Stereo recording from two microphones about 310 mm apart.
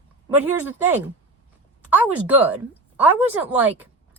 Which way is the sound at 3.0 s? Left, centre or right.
Centre.